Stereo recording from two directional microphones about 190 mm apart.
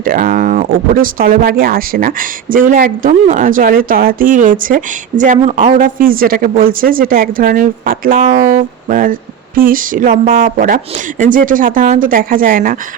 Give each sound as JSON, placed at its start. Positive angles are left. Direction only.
{"t": 0.0, "sound": "speech", "side_deg": -45}